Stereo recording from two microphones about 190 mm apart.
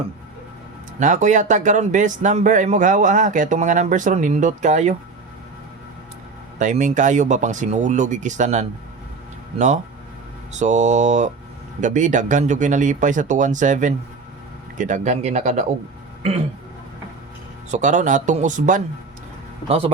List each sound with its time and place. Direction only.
0.9 s speech: 40° right (ahead or behind)
6.6 s speech: 40° right (ahead or behind)
17.7 s speech: 40° right (ahead or behind)
19.6 s speech: 30° right (ahead or behind)